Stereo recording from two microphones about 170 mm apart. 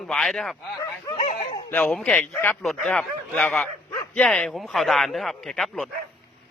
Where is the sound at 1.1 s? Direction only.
45° left (ahead or behind).